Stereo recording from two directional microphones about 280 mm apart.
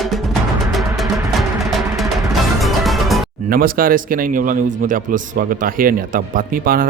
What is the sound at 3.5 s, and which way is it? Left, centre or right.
Speech, right.